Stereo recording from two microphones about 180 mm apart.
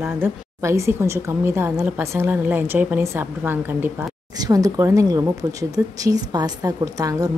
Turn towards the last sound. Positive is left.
turn(degrees=-20)  # may be behind; listen again after turning